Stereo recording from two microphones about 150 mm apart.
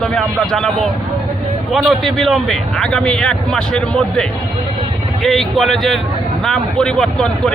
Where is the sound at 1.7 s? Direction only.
Centre (ahead or behind).